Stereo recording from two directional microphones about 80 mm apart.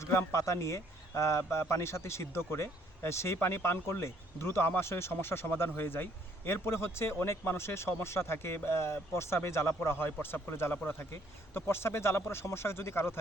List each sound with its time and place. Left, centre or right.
0.0 s a man's voice: left